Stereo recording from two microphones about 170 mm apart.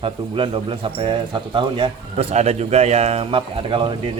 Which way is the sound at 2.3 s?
40° right (ahead or behind).